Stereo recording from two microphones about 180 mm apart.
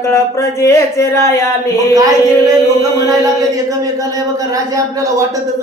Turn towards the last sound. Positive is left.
turn(degrees=-20)  # may be behind; listen again after turning